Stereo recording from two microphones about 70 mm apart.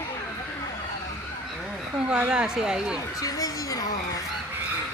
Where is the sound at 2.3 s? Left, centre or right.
Centre.